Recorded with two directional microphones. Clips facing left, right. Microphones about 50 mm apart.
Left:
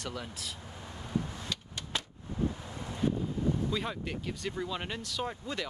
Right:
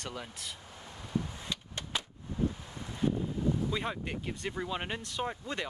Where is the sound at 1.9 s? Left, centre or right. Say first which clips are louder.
Even; centre.